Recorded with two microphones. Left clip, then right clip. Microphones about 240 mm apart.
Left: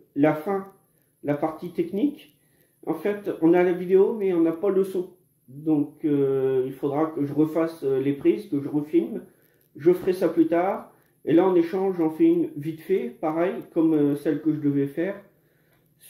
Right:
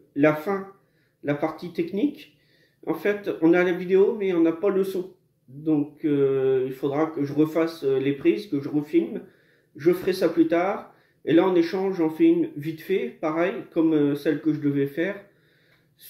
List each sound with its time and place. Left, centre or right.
0.1 s speech: centre